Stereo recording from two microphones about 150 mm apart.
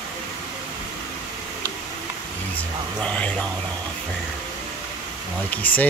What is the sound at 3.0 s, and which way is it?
Speech, 10° left (ahead or behind).